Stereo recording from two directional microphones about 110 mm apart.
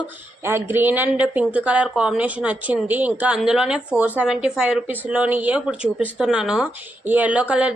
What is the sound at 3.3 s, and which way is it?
A woman's voice, 5° right (ahead or behind).